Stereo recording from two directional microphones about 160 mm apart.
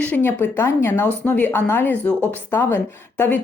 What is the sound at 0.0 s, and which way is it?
Speech, 10° left (ahead or behind).